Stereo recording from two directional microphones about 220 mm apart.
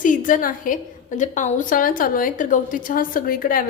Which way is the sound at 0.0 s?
35° left (ahead or behind).